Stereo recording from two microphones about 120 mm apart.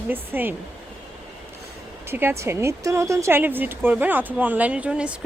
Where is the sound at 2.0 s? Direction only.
20° right (ahead or behind).